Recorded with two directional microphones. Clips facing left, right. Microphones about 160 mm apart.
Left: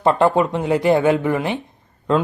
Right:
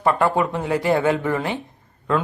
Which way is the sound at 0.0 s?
25° left (ahead or behind).